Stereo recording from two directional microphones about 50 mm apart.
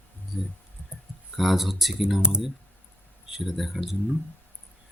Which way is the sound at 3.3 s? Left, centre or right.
Centre.